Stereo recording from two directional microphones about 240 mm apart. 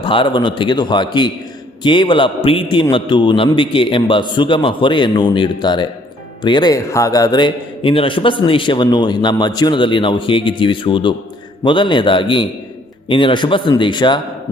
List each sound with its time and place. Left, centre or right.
0.0 s a man's voice: left